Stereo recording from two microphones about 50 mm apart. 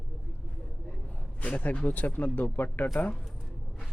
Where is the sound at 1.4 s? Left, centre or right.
Left.